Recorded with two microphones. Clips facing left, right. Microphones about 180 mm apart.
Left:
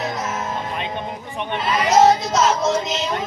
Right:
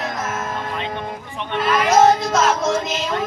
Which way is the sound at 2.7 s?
50° right (ahead or behind).